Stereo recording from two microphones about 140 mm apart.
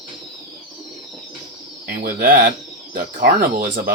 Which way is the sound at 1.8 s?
90° right.